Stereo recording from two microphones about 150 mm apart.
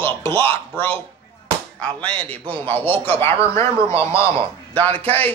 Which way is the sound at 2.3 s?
10° left (ahead or behind).